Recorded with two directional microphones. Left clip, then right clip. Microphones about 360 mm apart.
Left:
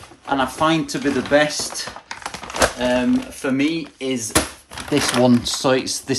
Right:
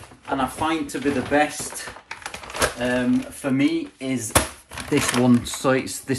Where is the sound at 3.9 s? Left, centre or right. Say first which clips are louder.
Left 2 dB; centre.